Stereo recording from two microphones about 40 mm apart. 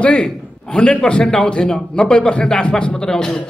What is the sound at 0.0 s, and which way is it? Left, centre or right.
A man's voice, left.